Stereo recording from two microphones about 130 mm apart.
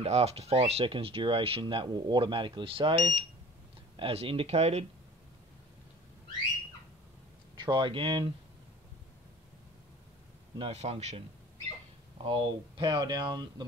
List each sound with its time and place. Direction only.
0.0 s speech: 55° right (ahead or behind)
7.5 s speech: 35° right (ahead or behind)
10.6 s a man's voice: 55° right (ahead or behind)
12.2 s speech: 45° right (ahead or behind)